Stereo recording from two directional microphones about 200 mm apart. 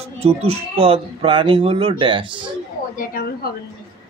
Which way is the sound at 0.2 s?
30° right (ahead or behind).